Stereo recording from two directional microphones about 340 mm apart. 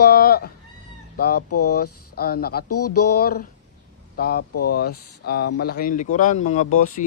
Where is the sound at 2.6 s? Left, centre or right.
Left.